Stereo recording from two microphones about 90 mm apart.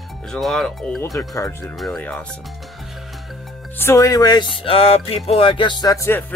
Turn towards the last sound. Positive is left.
turn(degrees=35)  # may be behind; listen again after turning